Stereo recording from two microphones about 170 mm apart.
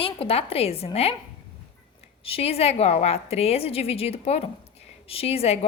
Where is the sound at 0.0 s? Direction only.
35° left (ahead or behind).